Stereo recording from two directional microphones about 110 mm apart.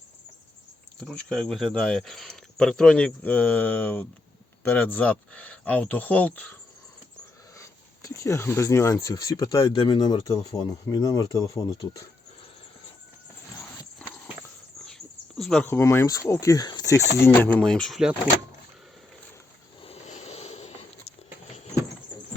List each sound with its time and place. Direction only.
0.9 s speech: 5° left (ahead or behind)
8.0 s speech: 25° left (ahead or behind)
9.6 s speech: 45° left (ahead or behind); by 12.0 s 30° left (ahead or behind)
14.0 s horse: 10° left (ahead or behind)
14.8 s a sound: 5° left (ahead or behind)
15.6 s speech: 25° left (ahead or behind); by 18.0 s 5° left (ahead or behind)
19.8 s a sound: 75° left (ahead or behind)